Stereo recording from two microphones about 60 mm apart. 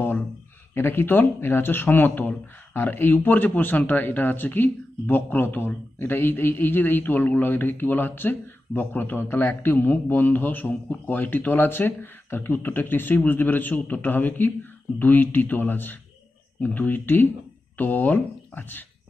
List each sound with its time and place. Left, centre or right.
0.7 s speech: left